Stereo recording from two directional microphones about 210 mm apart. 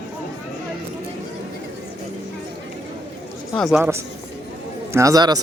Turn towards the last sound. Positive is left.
turn(degrees=-15)  # may be behind; listen again after turning